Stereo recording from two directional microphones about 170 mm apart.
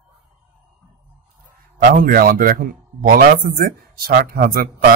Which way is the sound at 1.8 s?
60° right (ahead or behind).